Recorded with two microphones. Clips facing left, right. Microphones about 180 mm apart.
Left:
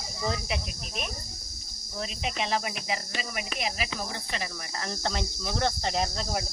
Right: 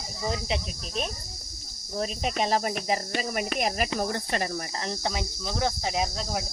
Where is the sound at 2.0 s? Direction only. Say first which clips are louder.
Right 4 dB; 40° right (ahead or behind).